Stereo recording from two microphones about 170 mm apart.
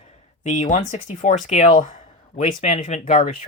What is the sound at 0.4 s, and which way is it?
Speech, 45° left (ahead or behind).